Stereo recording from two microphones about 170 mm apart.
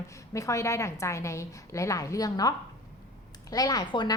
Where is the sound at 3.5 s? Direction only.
25° left (ahead or behind).